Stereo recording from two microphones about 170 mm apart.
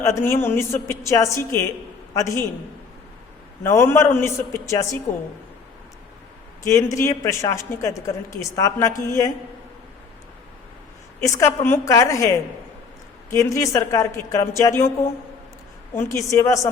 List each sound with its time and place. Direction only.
0.0 s a woman's voice: 15° left (ahead or behind)
3.6 s a woman's voice: 15° left (ahead or behind)
6.6 s a man's voice: 20° left (ahead or behind)
11.2 s a woman's voice: 15° left (ahead or behind)
16.0 s a woman's voice: 15° left (ahead or behind)